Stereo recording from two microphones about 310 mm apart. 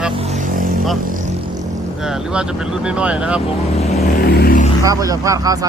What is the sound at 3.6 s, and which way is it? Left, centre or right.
Vehicle, centre.